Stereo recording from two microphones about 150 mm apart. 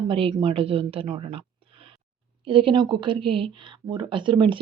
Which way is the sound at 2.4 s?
35° right (ahead or behind).